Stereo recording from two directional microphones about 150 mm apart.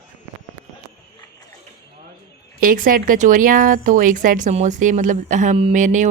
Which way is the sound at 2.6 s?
65° right (ahead or behind).